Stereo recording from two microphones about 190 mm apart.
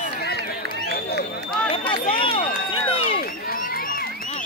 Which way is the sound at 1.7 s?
25° left (ahead or behind).